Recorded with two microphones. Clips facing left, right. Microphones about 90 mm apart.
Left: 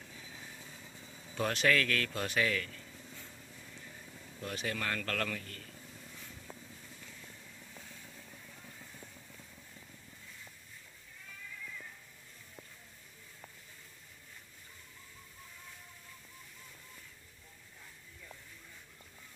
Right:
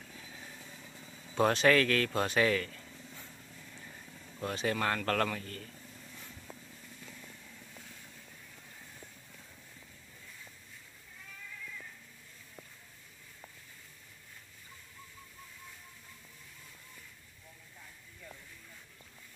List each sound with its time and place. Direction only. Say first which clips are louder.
1.3 s speech: right 5 dB; 30° right (ahead or behind)
4.4 s speech: right 5 dB; 35° right (ahead or behind)